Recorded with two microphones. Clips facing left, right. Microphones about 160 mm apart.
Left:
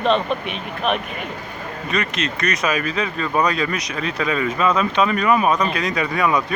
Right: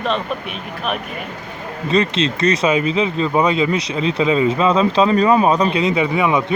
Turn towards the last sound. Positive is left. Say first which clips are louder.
# right 3 dB
turn(degrees=-20)  # may be behind; listen again after turning